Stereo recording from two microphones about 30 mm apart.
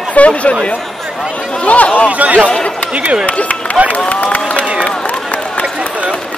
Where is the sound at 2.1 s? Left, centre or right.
Right.